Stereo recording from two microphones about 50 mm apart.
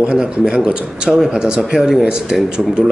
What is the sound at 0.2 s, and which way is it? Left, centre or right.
A man's voice, centre.